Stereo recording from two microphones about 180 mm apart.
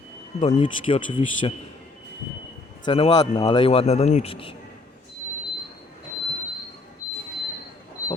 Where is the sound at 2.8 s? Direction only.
30° left (ahead or behind).